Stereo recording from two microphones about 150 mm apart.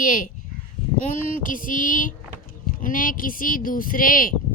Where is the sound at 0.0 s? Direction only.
65° left (ahead or behind).